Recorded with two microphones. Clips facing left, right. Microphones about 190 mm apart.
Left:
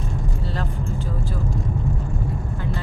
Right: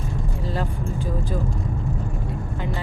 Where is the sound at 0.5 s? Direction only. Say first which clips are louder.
Right 2 dB; 10° right (ahead or behind).